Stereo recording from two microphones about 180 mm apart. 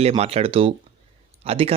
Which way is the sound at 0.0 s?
35° right (ahead or behind).